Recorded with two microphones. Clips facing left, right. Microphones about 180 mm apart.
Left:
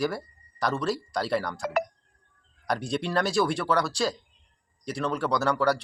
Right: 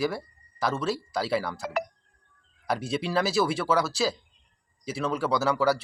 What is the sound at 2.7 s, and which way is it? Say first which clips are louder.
Speech: even; centre (ahead or behind).